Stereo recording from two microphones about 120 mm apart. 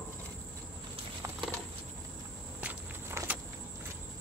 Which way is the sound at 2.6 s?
15° right (ahead or behind).